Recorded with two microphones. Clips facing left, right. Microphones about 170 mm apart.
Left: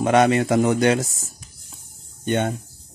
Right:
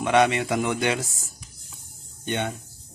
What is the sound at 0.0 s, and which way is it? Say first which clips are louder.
Speech: left 4 dB; 40° left (ahead or behind).